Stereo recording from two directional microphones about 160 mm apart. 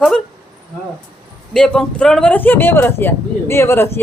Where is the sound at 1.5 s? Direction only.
5° left (ahead or behind).